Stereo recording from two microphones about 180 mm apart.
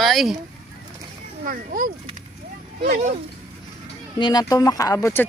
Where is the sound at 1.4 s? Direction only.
50° right (ahead or behind).